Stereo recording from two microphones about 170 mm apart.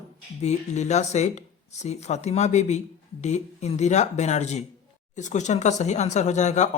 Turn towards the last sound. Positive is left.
turn(degrees=45)  # may be behind; listen again after turning